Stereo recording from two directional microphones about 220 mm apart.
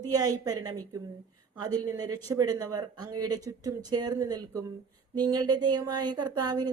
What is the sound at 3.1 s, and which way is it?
Speech, 90° right.